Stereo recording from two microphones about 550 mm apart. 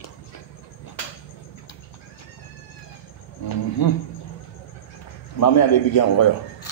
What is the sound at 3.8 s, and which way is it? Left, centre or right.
Speech, left.